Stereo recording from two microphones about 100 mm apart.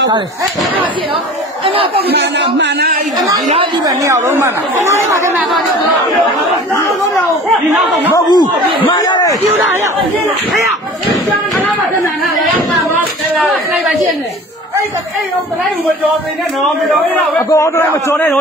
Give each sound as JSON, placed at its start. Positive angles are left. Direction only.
{"t": 1.6, "sound": "speech", "side_deg": -65}
{"t": 3.8, "sound": "speech", "side_deg": -35}
{"t": 8.2, "sound": "speech", "side_deg": 45}
{"t": 8.9, "sound": "a sound", "side_deg": 40}
{"t": 11.6, "sound": "speech", "side_deg": 20}
{"t": 17.4, "sound": "a man's voice", "side_deg": 30}